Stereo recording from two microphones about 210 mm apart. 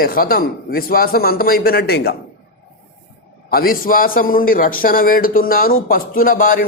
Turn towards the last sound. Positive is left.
turn(degrees=40)  # may be behind; listen again after turning